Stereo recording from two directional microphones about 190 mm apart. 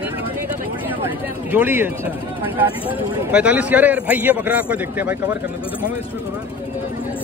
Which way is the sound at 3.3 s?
5° right (ahead or behind).